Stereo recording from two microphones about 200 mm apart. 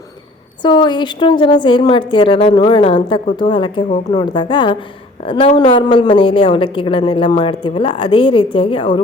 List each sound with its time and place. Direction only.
0.6 s a woman's voice: 20° left (ahead or behind)